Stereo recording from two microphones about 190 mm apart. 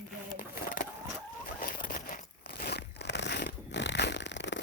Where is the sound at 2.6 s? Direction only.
60° left (ahead or behind).